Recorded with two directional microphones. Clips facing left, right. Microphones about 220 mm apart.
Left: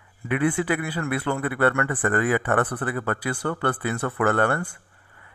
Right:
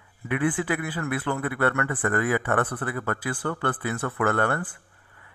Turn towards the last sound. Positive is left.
turn(degrees=30)  # may be behind; listen again after turning